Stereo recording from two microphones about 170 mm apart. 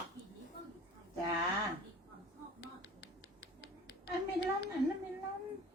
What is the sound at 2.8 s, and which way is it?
Finger snapping, 85° left.